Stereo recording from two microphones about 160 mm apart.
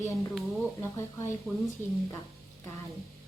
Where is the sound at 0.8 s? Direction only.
15° left (ahead or behind).